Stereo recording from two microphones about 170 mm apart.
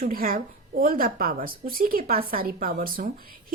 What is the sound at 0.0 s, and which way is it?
A woman's voice, 60° right (ahead or behind).